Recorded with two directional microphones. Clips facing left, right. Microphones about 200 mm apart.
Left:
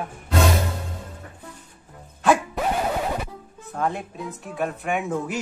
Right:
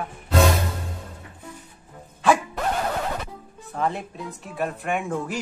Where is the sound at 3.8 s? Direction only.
Centre (ahead or behind).